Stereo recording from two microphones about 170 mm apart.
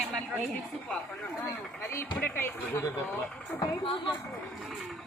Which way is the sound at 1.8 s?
15° left (ahead or behind).